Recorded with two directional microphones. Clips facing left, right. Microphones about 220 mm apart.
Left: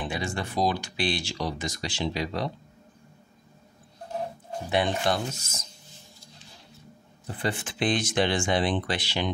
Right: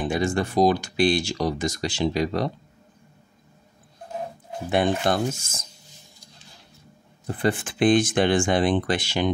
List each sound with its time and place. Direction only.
0.0 s speech: 45° right (ahead or behind)
4.6 s speech: 50° right (ahead or behind)
7.2 s speech: 50° right (ahead or behind)